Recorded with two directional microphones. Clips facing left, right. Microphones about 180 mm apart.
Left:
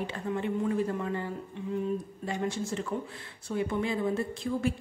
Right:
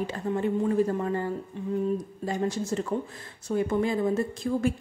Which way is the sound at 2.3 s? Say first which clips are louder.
Right 4 dB; 40° right (ahead or behind).